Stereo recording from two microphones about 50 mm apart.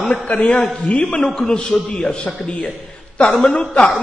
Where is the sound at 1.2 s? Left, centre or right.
Centre.